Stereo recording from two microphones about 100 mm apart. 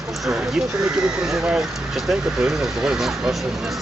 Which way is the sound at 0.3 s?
5° right (ahead or behind).